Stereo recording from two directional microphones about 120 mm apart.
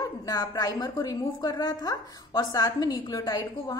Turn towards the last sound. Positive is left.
turn(degrees=30)  # may be behind; listen again after turning